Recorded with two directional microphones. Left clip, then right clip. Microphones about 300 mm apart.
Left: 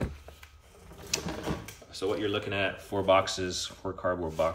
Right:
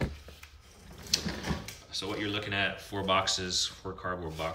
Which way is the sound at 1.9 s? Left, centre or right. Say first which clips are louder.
Left 4 dB; centre.